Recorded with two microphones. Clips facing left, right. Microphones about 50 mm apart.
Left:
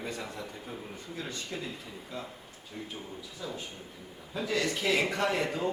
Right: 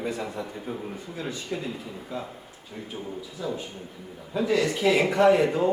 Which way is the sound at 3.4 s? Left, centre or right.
Centre.